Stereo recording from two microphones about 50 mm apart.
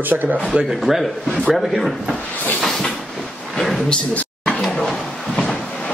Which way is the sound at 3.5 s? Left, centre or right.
Centre.